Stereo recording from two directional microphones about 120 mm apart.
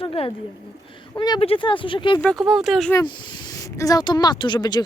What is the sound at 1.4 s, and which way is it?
Speech, 50° left (ahead or behind).